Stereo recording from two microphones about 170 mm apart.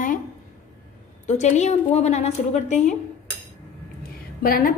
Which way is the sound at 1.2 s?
40° left (ahead or behind).